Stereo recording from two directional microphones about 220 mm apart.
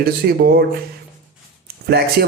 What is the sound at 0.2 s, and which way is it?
Speech, 45° right (ahead or behind).